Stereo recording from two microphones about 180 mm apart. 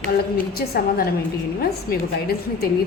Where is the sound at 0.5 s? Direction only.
60° left (ahead or behind).